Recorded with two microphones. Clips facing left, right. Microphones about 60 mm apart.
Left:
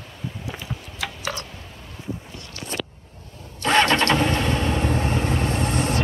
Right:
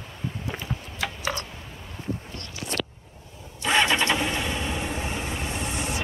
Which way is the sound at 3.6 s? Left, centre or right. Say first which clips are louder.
Left 4 dB; left.